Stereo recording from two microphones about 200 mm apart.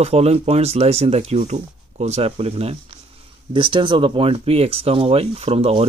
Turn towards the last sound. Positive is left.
turn(degrees=-30)  # may be behind; listen again after turning